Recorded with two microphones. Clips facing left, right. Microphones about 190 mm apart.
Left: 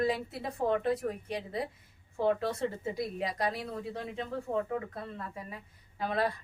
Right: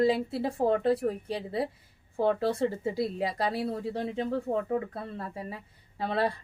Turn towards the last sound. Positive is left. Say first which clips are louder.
# right 2 dB
turn(degrees=-30)  # may be behind; listen again after turning